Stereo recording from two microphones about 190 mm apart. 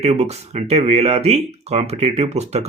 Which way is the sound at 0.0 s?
35° right (ahead or behind).